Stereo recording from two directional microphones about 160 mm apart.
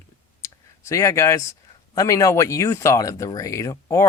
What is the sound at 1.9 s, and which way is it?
Speech, 20° left (ahead or behind).